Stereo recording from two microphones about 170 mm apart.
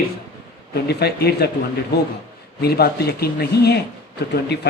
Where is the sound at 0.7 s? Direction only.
70° left (ahead or behind).